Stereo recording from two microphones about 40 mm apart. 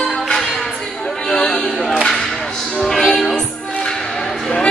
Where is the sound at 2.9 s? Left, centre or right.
Centre.